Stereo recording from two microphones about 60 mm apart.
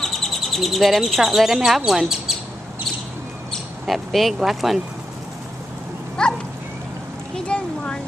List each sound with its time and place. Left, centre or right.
0.0 s speech: centre
3.8 s speech: centre
6.2 s a sound: centre